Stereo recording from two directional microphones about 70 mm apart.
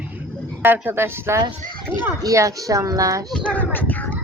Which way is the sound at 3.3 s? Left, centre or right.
Centre.